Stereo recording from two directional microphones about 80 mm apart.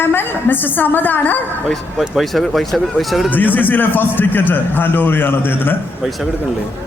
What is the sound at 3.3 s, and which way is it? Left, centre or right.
A woman's voice, left.